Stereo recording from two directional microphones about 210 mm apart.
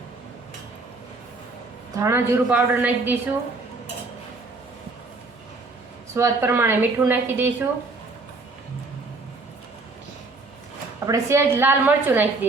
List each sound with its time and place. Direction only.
2.0 s a woman's voice: 10° right (ahead or behind)
6.1 s a woman's voice: 10° right (ahead or behind)
11.0 s a woman's voice: 15° right (ahead or behind)